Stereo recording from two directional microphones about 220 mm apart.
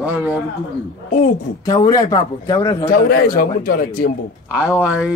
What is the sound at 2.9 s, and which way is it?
Speech, 40° left (ahead or behind).